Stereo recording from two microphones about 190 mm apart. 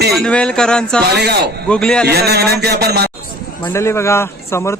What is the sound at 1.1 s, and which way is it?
Speech, 60° right (ahead or behind).